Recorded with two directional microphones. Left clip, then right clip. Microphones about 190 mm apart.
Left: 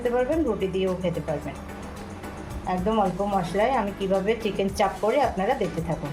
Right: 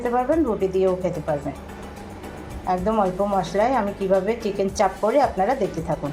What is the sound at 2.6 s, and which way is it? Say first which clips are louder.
Speech: right 3 dB; 15° right (ahead or behind).